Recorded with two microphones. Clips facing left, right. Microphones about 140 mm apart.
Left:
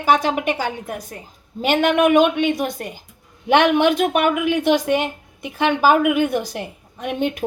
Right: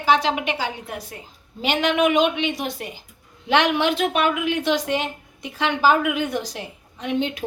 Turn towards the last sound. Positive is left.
turn(degrees=55)  # may be behind; listen again after turning